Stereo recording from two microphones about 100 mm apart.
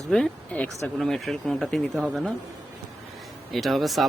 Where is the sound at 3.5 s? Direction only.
Centre (ahead or behind).